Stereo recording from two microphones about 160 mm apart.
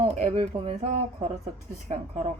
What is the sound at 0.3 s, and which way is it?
Speech, 50° right (ahead or behind).